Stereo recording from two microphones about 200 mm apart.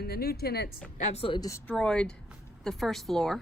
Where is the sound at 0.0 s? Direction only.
50° left (ahead or behind).